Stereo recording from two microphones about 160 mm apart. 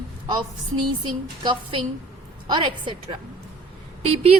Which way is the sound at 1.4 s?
30° right (ahead or behind).